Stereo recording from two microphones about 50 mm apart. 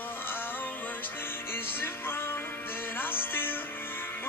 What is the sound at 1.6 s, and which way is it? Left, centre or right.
Music, left.